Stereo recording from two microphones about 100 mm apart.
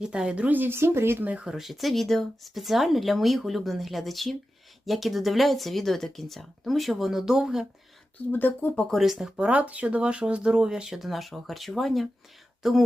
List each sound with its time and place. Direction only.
0.0 s speech: 10° right (ahead or behind)
8.3 s speech: 20° left (ahead or behind)
9.0 s speech: 5° right (ahead or behind)